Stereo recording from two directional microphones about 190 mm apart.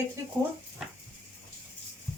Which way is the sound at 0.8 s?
5° right (ahead or behind).